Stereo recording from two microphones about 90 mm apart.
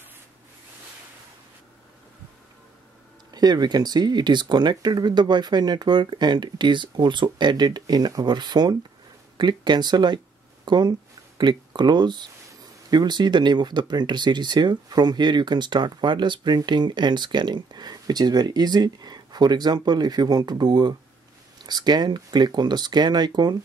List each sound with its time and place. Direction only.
3.3 s speech: 50° right (ahead or behind)